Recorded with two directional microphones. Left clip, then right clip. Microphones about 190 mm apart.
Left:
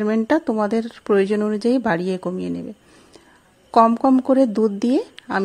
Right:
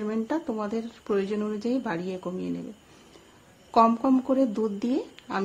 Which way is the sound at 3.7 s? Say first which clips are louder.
Left 6 dB; 40° left (ahead or behind).